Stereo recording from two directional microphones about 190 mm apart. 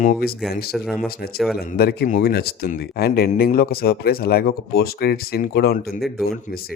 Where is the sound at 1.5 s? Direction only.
55° left (ahead or behind).